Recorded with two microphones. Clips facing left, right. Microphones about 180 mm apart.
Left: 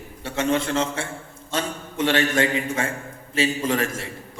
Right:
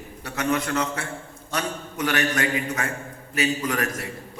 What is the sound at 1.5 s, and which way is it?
A man's voice, 25° left (ahead or behind).